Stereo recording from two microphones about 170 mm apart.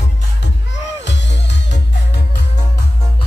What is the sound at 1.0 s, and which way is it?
Music, 90° left.